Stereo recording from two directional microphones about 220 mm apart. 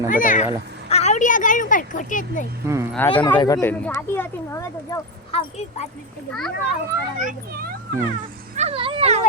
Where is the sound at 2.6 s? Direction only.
10° right (ahead or behind).